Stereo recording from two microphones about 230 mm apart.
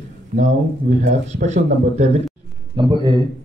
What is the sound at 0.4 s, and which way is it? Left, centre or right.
A man's voice, right.